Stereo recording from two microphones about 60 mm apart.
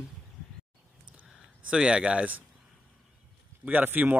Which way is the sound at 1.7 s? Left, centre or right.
Centre.